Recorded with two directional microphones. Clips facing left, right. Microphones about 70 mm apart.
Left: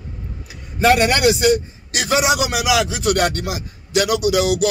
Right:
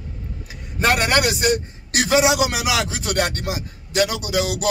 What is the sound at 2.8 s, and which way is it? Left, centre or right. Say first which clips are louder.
Speech: left 4 dB; right.